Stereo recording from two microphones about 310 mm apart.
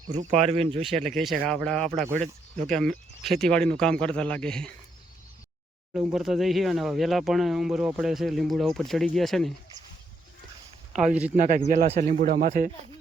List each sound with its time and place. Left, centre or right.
0.1 s speech: right
0.8 s speech: centre
1.9 s speech: centre
2.6 s speech: centre
5.9 s speech: centre
10.9 s speech: centre
11.3 s speech: right